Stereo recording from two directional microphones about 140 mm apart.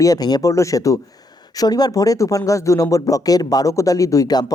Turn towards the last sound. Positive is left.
turn(degrees=30)  # may be behind; listen again after turning